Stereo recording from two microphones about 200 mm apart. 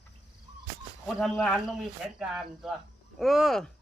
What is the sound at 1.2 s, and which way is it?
Speech, centre (ahead or behind).